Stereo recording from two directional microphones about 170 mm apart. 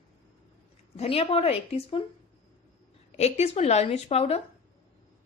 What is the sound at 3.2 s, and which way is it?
A woman's voice, 40° left (ahead or behind).